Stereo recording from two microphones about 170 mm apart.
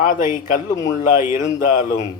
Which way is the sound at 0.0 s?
55° left (ahead or behind).